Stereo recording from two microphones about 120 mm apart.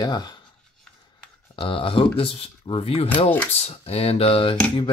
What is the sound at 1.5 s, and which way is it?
Speech, 45° left (ahead or behind).